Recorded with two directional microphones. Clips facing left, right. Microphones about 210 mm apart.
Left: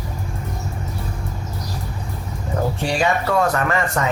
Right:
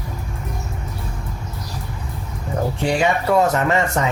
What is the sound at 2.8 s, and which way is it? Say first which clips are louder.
Speech: right 3 dB; 20° right (ahead or behind).